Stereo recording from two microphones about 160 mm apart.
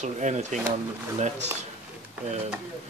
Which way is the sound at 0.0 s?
45° right (ahead or behind).